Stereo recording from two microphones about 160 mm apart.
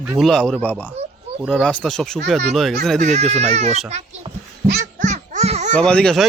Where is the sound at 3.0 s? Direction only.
45° right (ahead or behind).